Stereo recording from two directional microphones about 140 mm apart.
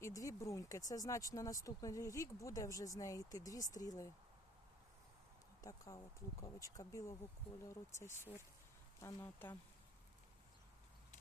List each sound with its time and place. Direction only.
0.0 s speech: 25° left (ahead or behind)
5.6 s speech: 25° left (ahead or behind)